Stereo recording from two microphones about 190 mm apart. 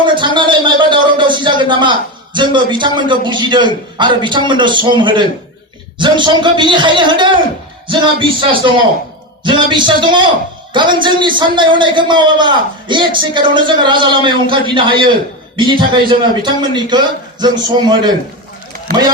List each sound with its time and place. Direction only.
0.0 s a man's voice: 25° right (ahead or behind)